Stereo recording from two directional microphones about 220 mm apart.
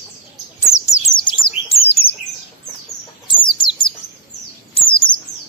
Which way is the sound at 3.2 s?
20° left (ahead or behind).